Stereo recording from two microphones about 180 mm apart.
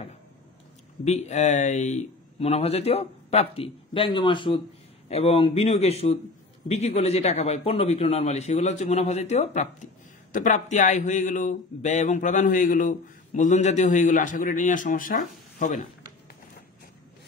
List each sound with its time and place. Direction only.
1.0 s speech: 40° left (ahead or behind)